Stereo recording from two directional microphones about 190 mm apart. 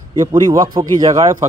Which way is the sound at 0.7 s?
25° right (ahead or behind).